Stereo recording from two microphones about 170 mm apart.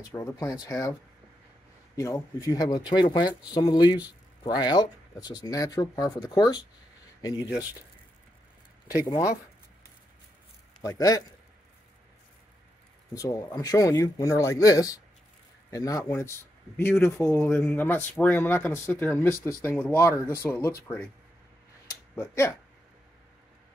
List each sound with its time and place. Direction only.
0.1 s speech: 20° left (ahead or behind)
2.0 s speech: 20° left (ahead or behind)
10.8 s speech: 20° left (ahead or behind)
13.1 s speech: 20° left (ahead or behind)
22.1 s speech: 15° left (ahead or behind)